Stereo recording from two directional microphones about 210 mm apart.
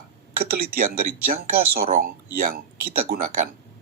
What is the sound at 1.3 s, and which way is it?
Speech, 45° right (ahead or behind).